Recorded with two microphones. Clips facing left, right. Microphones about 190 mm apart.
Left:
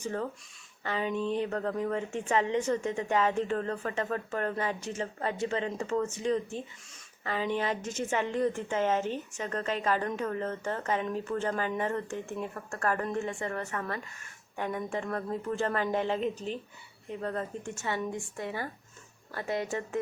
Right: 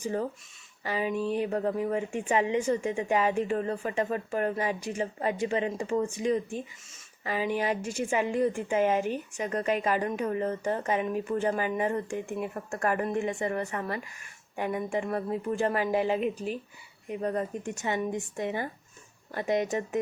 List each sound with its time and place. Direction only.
0.0 s a woman's voice: 15° right (ahead or behind)